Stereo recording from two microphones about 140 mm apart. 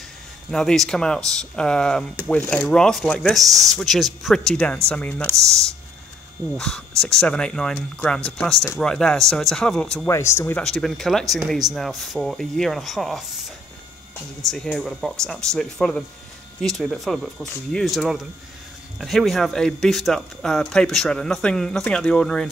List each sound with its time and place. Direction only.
0.5 s speech: 5° left (ahead or behind)
6.5 s speech: 5° left (ahead or behind)
10.0 s speech: 20° left (ahead or behind)
10.6 s speech: 5° left (ahead or behind)